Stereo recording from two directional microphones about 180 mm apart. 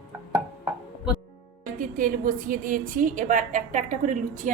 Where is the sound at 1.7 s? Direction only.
45° right (ahead or behind).